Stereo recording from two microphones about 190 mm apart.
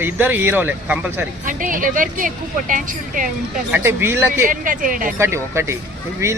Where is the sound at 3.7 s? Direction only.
10° right (ahead or behind).